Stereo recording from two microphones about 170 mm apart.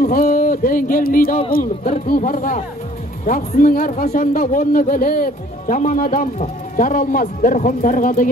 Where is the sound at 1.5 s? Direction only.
55° left (ahead or behind).